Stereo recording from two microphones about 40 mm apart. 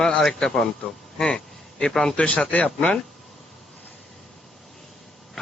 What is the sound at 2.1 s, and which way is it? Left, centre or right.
Speech, left.